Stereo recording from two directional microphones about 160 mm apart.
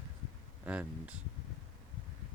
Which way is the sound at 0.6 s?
10° right (ahead or behind).